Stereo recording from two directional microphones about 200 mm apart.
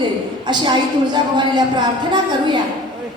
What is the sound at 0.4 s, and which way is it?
A woman's voice, 20° right (ahead or behind).